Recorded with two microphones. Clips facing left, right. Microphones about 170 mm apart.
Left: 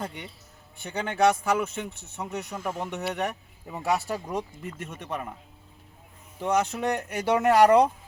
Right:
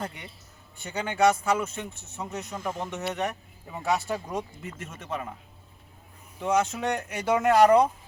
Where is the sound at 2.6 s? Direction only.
5° left (ahead or behind).